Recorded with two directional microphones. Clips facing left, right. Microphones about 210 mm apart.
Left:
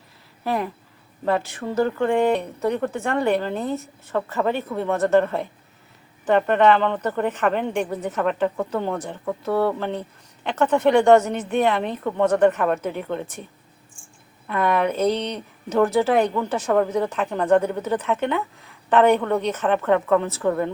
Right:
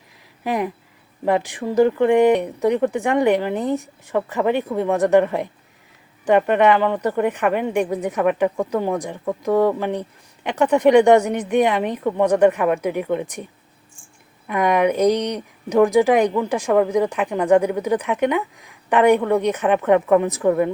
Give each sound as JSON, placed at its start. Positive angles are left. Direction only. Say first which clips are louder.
{"t": 0.4, "sound": "speech", "louder": "right 2 dB", "side_deg": -15}
{"t": 14.4, "sound": "speech", "louder": "right 3 dB", "side_deg": -15}